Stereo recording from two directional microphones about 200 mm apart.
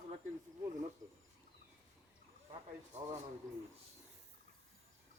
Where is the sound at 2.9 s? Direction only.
35° right (ahead or behind).